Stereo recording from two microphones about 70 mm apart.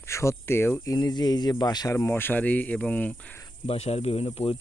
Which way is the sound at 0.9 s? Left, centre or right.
Left.